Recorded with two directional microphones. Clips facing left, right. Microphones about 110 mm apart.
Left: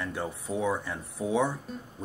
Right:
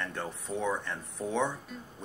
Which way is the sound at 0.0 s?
10° left (ahead or behind).